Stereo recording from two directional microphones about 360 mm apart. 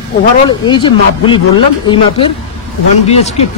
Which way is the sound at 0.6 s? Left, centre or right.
Centre.